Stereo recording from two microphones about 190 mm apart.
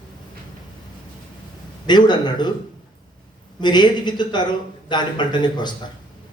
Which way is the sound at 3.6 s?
25° left (ahead or behind).